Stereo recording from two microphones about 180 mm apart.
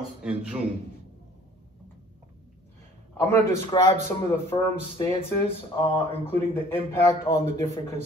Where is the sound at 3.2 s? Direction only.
15° left (ahead or behind).